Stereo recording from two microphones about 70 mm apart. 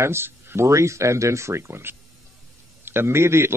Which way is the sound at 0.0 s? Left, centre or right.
Right.